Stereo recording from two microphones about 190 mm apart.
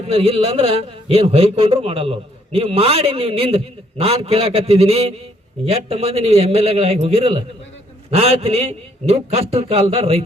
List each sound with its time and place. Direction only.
0.1 s a man's voice: 30° right (ahead or behind)